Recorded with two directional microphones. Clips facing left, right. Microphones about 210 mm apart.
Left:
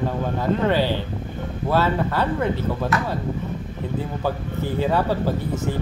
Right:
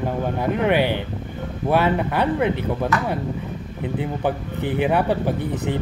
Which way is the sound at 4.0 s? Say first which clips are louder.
Right 2 dB; 20° right (ahead or behind).